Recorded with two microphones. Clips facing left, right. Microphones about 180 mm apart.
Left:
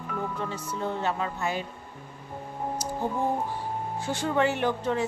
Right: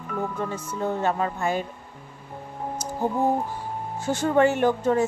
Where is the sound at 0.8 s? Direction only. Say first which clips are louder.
Right 5 dB; 50° right (ahead or behind).